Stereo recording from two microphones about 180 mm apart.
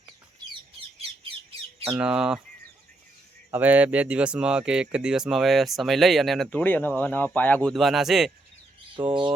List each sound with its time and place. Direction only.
1.9 s speech: 5° right (ahead or behind)
3.5 s speech: 10° right (ahead or behind)
9.0 s speech: 30° right (ahead or behind)